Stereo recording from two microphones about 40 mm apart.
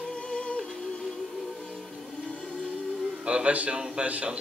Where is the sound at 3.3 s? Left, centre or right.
Right.